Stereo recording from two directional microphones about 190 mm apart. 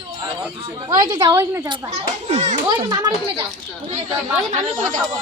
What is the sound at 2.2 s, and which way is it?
Speech, 35° right (ahead or behind).